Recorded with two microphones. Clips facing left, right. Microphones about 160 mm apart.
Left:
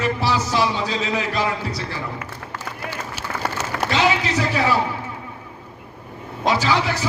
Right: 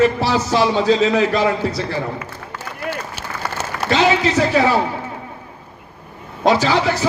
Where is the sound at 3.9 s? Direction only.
25° right (ahead or behind).